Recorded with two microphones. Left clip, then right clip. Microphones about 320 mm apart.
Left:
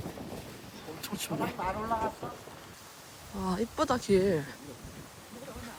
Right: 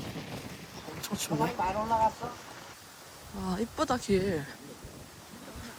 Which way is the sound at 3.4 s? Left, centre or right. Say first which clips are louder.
Left 1 dB; centre.